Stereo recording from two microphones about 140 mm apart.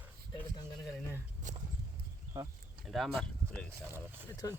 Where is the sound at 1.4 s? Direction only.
65° right (ahead or behind).